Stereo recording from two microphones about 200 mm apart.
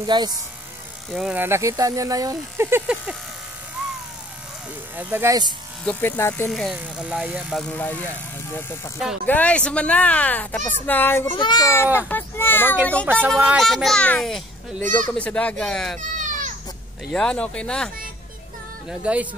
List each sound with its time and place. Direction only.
0.0 s speech: 20° right (ahead or behind)
1.1 s speech: 5° right (ahead or behind)
4.9 s speech: 10° right (ahead or behind)
5.9 s speech: 10° left (ahead or behind)
6.5 s speech: centre (ahead or behind)
11.3 s a child's voice: 20° left (ahead or behind)
13.0 s speech: 10° right (ahead or behind)
16.0 s baby cry: 40° right (ahead or behind)
17.1 s speech: 5° left (ahead or behind)